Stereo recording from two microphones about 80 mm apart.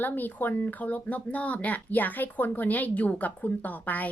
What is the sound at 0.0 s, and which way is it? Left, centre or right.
Speech, left.